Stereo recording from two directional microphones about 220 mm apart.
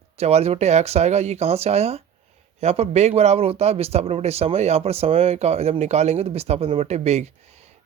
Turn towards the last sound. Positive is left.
turn(degrees=-30)  # may be behind; listen again after turning